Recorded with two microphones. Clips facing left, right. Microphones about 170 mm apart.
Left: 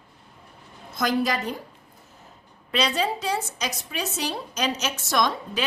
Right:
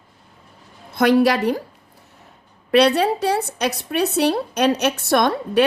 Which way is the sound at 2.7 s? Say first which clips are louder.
Right 10 dB; 65° right (ahead or behind).